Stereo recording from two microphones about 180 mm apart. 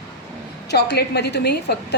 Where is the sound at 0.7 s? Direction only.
65° left (ahead or behind).